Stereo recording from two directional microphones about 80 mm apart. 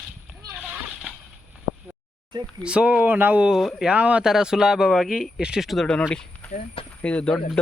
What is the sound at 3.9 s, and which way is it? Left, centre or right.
Speech, centre.